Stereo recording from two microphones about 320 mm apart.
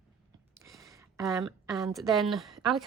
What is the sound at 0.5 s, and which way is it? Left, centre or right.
A woman's voice, centre.